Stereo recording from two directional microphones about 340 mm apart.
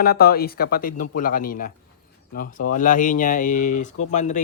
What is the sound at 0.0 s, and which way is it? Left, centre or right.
A man's voice, left.